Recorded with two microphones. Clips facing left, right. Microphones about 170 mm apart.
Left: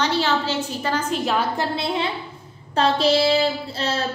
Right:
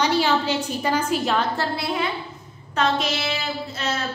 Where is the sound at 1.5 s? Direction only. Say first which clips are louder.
Left 1 dB; 25° left (ahead or behind).